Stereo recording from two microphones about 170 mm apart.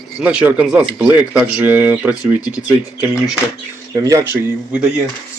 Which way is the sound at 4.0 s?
20° right (ahead or behind).